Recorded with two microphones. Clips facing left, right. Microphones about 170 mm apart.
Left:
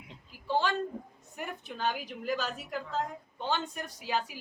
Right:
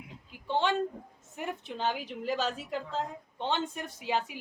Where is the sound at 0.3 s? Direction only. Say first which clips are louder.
Right 1 dB; 25° right (ahead or behind).